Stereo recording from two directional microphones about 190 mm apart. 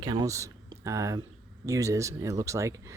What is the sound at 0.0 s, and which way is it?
Speech, 20° right (ahead or behind).